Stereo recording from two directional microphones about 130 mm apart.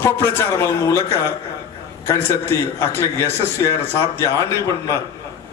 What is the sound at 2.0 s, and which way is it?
A man's voice, 20° left (ahead or behind).